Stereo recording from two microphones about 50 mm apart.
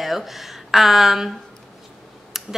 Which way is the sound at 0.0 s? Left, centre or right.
Centre.